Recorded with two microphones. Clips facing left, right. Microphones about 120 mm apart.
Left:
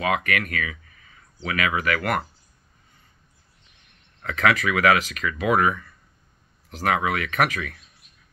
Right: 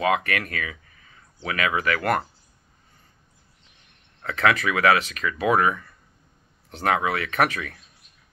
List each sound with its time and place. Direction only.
0.0 s speech: 30° right (ahead or behind)
4.2 s speech: 30° right (ahead or behind)